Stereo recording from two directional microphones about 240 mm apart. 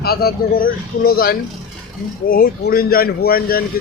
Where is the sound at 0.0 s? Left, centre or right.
Left.